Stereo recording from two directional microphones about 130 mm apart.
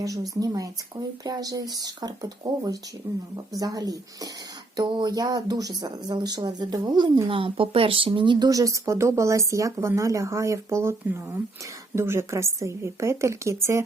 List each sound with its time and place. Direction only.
0.0 s speech: 25° right (ahead or behind)
3.1 s speech: 20° right (ahead or behind)
3.6 s speech: 30° right (ahead or behind)